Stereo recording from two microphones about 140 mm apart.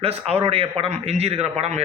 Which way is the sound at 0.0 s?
45° right (ahead or behind).